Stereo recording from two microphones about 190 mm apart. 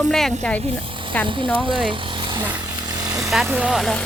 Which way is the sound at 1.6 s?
25° right (ahead or behind).